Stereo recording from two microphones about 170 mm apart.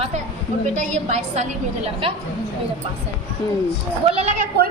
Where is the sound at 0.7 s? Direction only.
45° right (ahead or behind).